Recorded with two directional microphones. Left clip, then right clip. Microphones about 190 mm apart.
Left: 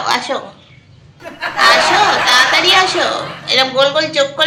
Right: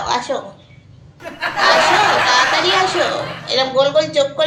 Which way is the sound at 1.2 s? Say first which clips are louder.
Left 4 dB; centre (ahead or behind).